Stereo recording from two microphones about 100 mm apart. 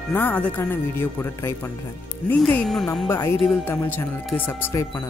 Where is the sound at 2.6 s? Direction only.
5° left (ahead or behind).